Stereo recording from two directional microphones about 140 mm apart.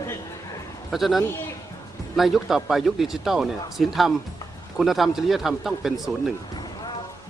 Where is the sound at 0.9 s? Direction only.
Centre (ahead or behind).